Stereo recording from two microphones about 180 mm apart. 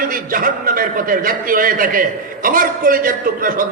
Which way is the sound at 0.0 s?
50° right (ahead or behind).